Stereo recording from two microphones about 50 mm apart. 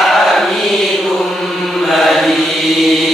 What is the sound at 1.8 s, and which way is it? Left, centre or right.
Mantra, centre.